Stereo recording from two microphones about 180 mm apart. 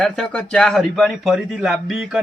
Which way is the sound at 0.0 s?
5° left (ahead or behind).